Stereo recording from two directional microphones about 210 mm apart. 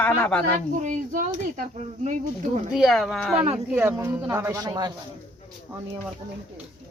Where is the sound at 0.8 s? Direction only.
35° right (ahead or behind).